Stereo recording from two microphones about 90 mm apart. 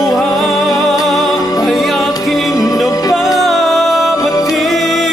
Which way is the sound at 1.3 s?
45° left (ahead or behind).